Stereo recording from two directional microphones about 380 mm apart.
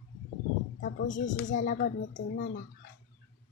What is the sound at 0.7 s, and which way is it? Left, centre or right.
Speech, centre.